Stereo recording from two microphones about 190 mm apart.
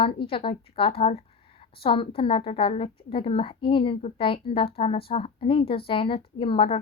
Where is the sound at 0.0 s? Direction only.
30° left (ahead or behind).